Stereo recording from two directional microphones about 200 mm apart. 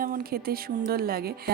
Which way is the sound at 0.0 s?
45° right (ahead or behind).